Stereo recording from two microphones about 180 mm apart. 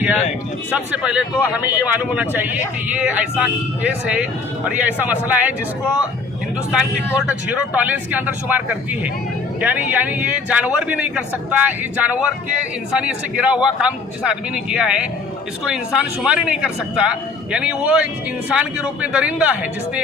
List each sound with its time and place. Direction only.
0.7 s speech: 5° right (ahead or behind)
7.7 s speech: 10° right (ahead or behind)